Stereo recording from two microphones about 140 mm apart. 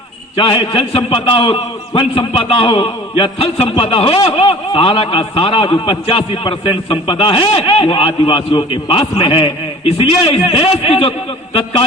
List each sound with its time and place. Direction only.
0.3 s a man's voice: 40° left (ahead or behind)